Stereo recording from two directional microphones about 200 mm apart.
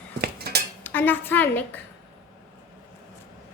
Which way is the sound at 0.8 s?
10° left (ahead or behind).